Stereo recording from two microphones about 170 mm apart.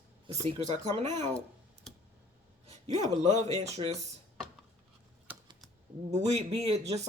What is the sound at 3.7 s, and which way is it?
Speech, 40° right (ahead or behind).